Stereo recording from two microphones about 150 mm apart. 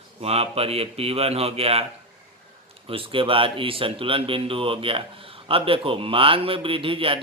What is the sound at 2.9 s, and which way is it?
A man's voice, 35° right (ahead or behind).